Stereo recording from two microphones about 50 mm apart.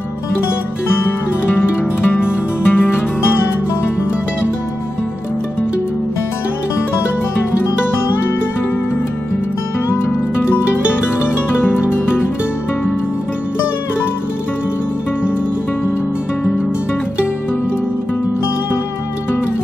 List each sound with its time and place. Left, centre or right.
1.6 s music: left
9.8 s music: left